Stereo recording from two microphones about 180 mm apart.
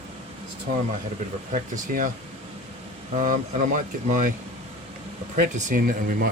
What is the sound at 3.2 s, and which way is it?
Speech, 45° right (ahead or behind).